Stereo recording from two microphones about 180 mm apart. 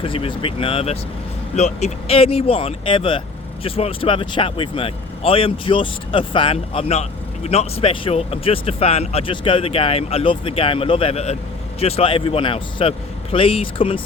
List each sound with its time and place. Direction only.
0.0 s speech: 30° left (ahead or behind)